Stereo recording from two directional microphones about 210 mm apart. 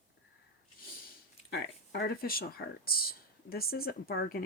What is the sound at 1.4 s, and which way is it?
Speech, 50° left (ahead or behind).